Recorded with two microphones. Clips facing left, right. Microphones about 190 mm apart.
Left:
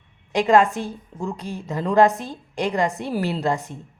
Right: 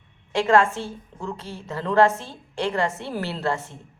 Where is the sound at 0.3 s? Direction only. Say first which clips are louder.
Left 2 dB; 15° left (ahead or behind).